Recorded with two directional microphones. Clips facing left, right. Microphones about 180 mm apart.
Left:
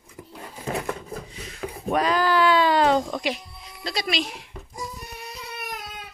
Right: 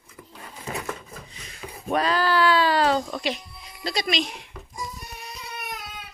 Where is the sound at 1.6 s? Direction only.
65° left (ahead or behind).